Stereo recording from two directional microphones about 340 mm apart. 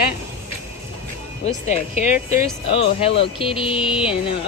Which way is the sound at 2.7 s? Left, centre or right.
Centre.